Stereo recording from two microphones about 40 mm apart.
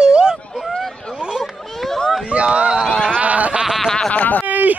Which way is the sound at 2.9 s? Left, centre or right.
Centre.